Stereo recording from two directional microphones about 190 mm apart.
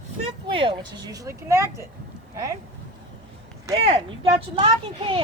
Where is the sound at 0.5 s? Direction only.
25° right (ahead or behind).